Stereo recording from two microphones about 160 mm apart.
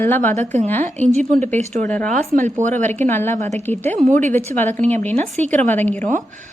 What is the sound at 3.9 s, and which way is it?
Speech, 50° right (ahead or behind).